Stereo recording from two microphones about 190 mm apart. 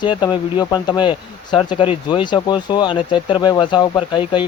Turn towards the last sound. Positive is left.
turn(degrees=25)  # may be behind; listen again after turning